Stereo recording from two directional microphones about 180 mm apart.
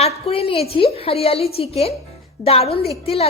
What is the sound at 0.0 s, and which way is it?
A woman's voice, 35° left (ahead or behind).